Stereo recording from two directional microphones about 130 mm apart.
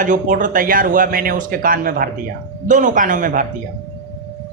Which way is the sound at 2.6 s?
75° right (ahead or behind).